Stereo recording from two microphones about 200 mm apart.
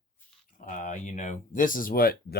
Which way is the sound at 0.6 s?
40° left (ahead or behind).